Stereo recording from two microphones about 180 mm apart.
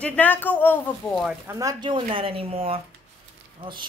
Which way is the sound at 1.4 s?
20° right (ahead or behind).